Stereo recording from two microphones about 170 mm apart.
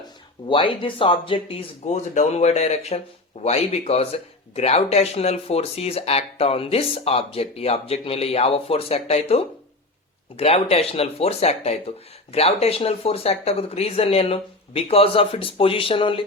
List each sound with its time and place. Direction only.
0.4 s speech: 30° left (ahead or behind)